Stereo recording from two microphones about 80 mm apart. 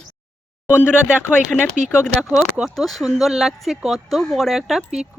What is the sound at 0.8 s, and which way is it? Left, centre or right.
Speech, centre.